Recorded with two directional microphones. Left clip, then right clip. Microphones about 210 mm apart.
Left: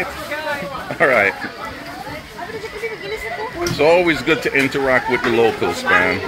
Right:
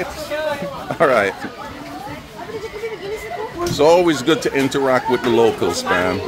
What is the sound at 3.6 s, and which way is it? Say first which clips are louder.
A man's voice: right 1 dB; 15° right (ahead or behind).